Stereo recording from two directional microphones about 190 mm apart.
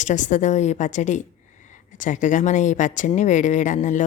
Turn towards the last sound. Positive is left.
turn(degrees=40)  # may be behind; listen again after turning